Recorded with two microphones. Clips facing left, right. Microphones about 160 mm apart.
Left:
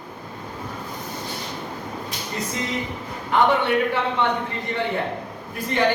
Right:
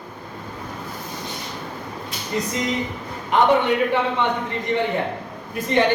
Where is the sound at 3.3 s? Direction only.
15° right (ahead or behind).